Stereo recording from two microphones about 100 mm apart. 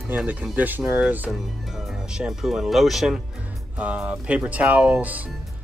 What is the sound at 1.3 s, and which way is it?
Speech, centre (ahead or behind).